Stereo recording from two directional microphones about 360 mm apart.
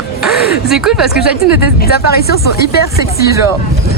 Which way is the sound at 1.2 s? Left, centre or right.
Left.